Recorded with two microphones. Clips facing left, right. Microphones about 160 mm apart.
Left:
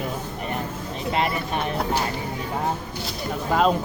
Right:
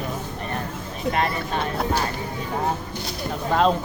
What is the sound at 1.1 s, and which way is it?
Speech, 20° left (ahead or behind).